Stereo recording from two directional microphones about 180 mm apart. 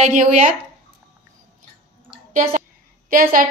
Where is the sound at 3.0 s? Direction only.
50° right (ahead or behind).